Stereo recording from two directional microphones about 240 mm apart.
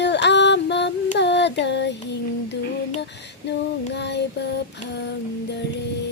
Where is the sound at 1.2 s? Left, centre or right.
Left.